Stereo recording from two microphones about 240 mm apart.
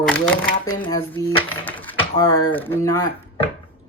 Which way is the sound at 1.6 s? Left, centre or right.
Centre.